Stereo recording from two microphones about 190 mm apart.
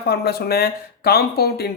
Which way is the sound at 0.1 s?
55° left (ahead or behind).